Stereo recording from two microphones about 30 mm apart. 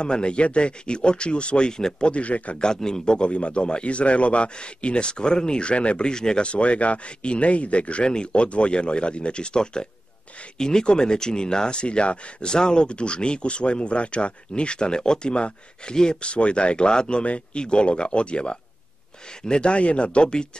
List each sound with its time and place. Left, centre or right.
0.0 s speech: left
1.7 s a man's voice: left
2.0 s speech: left
2.5 s a man's voice: left
3.2 s speech: left
6.1 s a man's voice: left
6.4 s speech: left
8.0 s speech: left